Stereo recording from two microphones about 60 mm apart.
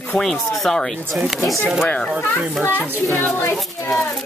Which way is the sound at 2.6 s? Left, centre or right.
Left.